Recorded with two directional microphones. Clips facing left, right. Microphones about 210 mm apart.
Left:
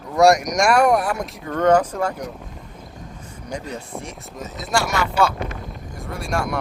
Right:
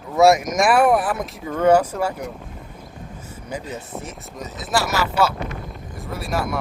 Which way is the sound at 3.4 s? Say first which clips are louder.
Left 1 dB; 5° right (ahead or behind).